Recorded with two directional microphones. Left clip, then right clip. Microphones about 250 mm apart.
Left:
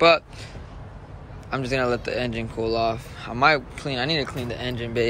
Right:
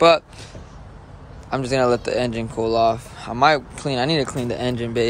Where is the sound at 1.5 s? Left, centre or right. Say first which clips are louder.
Right 5 dB; centre.